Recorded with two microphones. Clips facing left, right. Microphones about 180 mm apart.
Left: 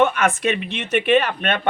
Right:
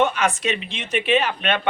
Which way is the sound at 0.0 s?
55° left (ahead or behind).